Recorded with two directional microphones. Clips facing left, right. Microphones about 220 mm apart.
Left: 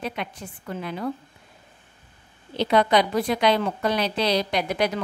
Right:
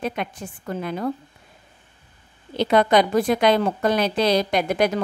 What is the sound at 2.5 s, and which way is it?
A woman's voice, 50° right (ahead or behind).